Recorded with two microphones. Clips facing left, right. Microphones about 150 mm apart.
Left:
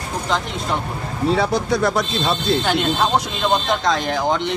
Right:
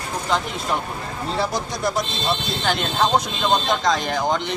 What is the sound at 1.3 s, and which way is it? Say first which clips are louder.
Speech: left 5 dB; 65° left (ahead or behind).